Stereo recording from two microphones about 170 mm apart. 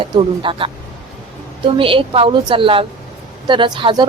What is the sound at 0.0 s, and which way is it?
A woman's voice, 30° right (ahead or behind).